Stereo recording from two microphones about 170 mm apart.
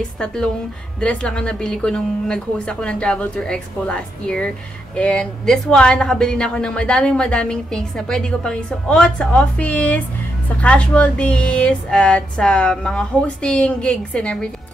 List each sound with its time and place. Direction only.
1.0 s a woman's voice: 5° left (ahead or behind)